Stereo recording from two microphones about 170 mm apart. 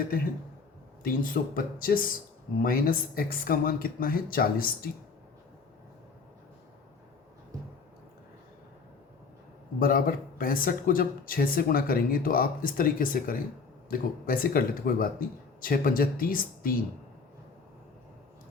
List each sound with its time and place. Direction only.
1.0 s speech: 55° left (ahead or behind)
9.8 s speech: 55° left (ahead or behind)